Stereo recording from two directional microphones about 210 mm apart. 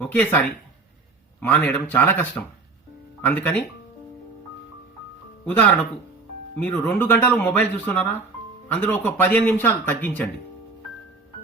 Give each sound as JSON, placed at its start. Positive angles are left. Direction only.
{"t": 0.0, "sound": "speech", "side_deg": 10}
{"t": 6.6, "sound": "speech", "side_deg": 10}